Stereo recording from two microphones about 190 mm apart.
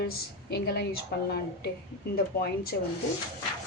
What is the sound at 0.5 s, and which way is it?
Speech, 60° left (ahead or behind).